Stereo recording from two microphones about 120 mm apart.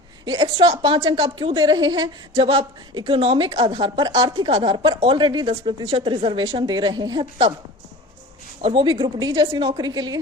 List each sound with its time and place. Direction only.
0.3 s a woman's voice: 35° right (ahead or behind)
2.3 s a woman's voice: 50° right (ahead or behind)
4.9 s a woman's voice: 35° right (ahead or behind)
8.6 s a woman's voice: 45° right (ahead or behind)